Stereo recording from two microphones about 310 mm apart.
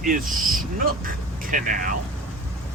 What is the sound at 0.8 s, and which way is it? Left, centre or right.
Speech, right.